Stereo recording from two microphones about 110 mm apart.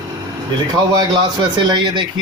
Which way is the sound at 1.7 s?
45° right (ahead or behind).